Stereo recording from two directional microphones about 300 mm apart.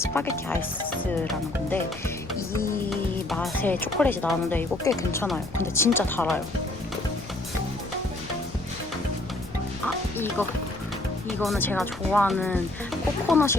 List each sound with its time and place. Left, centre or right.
0.0 s speech: centre
9.8 s music: centre
11.3 s speech: centre